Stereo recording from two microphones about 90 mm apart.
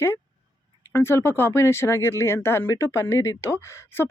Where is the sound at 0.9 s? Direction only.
25° left (ahead or behind).